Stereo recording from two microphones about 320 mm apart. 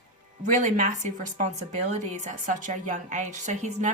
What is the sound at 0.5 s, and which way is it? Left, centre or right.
A woman's voice, right.